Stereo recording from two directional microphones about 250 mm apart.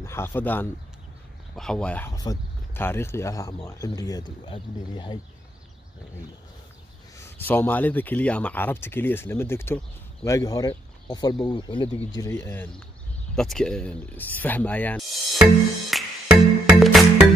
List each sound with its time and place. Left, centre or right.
0.0 s speech: centre
7.2 s speech: centre
15.9 s music: centre